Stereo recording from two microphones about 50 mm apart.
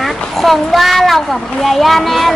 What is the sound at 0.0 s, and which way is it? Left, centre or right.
A child's voice, centre.